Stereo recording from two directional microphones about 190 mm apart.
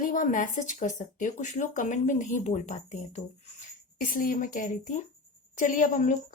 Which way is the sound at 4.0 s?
45° left (ahead or behind).